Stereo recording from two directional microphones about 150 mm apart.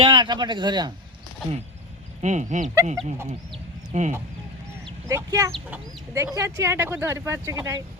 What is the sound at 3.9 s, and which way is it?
Speech, 50° right (ahead or behind).